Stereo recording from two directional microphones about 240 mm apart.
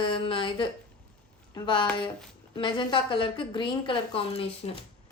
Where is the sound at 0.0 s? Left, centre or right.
Left.